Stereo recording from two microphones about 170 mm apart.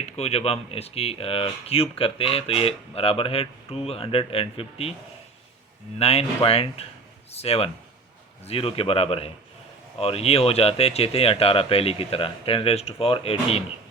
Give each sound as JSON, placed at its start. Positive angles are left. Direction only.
{"t": 0.0, "sound": "speech", "side_deg": 40}
{"t": 6.0, "sound": "speech", "side_deg": 35}